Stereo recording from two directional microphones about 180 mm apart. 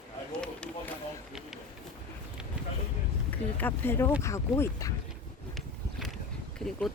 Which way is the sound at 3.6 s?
10° left (ahead or behind).